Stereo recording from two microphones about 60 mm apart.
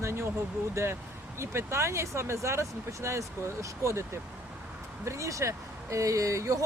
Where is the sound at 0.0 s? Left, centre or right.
Right.